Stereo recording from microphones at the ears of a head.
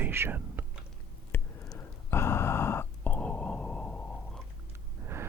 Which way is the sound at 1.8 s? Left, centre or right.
Left.